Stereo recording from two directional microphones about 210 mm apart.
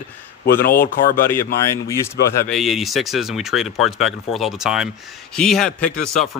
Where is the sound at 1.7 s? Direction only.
15° left (ahead or behind).